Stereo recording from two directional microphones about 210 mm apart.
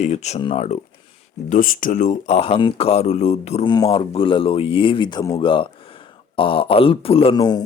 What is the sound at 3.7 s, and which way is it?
Speech, 20° left (ahead or behind).